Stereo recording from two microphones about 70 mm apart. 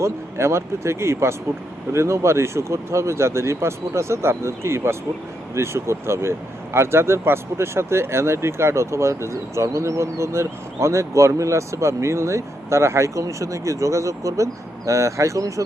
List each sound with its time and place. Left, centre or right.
0.0 s speech: right